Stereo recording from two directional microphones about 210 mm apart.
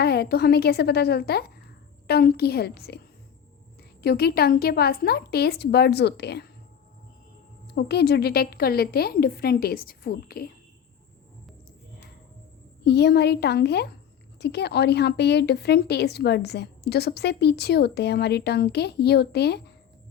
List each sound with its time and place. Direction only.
0.0 s speech: 50° left (ahead or behind)
4.0 s speech: 50° left (ahead or behind)
7.7 s speech: 50° left (ahead or behind)
12.8 s speech: 50° left (ahead or behind)